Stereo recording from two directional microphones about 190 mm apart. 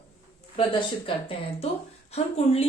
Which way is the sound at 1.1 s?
30° left (ahead or behind).